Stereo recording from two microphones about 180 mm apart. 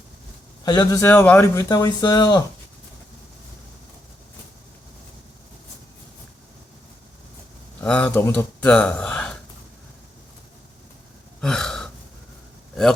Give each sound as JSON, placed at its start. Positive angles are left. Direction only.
{"t": 0.6, "sound": "speech", "side_deg": 20}
{"t": 1.1, "sound": "speech", "side_deg": 10}
{"t": 1.5, "sound": "speech", "side_deg": 20}
{"t": 7.8, "sound": "speech", "side_deg": 5}
{"t": 11.3, "sound": "gasp", "side_deg": 5}